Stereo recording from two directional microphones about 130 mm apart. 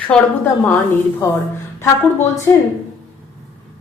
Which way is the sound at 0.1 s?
5° left (ahead or behind).